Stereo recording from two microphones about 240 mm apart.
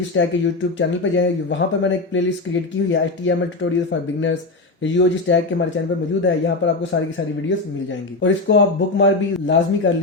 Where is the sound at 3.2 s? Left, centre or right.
Left.